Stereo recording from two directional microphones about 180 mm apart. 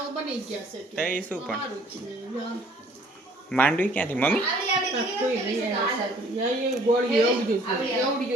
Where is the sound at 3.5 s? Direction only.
10° left (ahead or behind).